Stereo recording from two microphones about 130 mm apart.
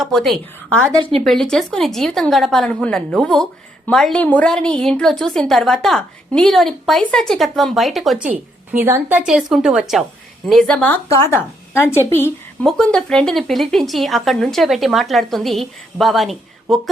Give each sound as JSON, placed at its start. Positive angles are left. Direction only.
{"t": 0.0, "sound": "a woman's voice", "side_deg": 5}
{"t": 8.8, "sound": "a woman's voice", "side_deg": -15}
{"t": 12.6, "sound": "a woman's voice", "side_deg": 5}